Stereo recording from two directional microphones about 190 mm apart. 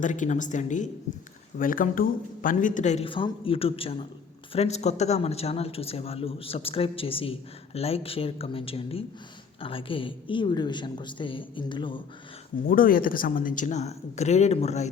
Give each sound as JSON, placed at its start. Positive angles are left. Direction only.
{"t": 0.0, "sound": "a woman's voice", "side_deg": 40}
{"t": 12.6, "sound": "speech", "side_deg": 50}